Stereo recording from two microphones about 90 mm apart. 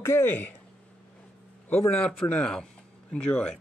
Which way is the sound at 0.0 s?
25° left (ahead or behind).